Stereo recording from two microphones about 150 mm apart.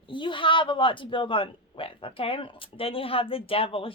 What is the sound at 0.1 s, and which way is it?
A woman's voice, 35° left (ahead or behind).